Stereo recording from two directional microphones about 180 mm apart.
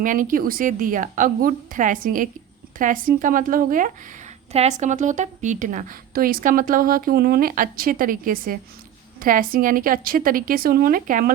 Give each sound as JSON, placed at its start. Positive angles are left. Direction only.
{"t": 0.0, "sound": "a woman's voice", "side_deg": -45}